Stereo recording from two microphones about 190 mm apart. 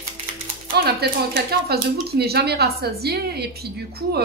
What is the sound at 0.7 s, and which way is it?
Speech, 55° right (ahead or behind).